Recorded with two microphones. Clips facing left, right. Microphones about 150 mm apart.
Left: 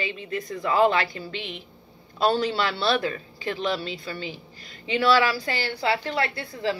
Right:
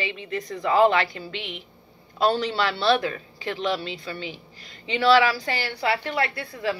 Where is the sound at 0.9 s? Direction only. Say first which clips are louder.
Right 1 dB; 35° left (ahead or behind).